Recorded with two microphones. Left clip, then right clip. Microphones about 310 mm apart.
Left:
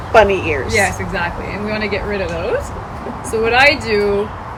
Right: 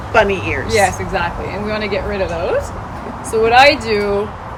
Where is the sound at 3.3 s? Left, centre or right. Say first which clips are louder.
Right 2 dB; centre.